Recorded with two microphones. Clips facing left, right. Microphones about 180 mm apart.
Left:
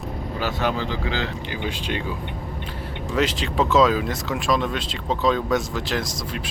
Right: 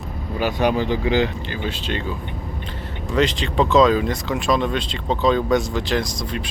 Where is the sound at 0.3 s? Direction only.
15° right (ahead or behind).